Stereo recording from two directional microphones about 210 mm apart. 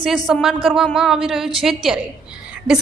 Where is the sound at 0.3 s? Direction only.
Centre (ahead or behind).